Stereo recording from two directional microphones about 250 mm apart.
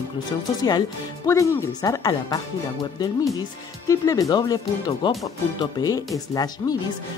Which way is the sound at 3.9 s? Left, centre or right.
Centre.